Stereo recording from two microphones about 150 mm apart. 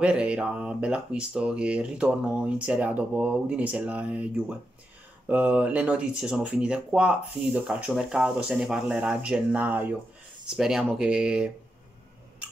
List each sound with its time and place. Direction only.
0.0 s speech: 5° right (ahead or behind)